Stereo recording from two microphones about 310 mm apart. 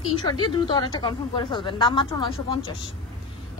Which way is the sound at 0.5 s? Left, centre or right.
Centre.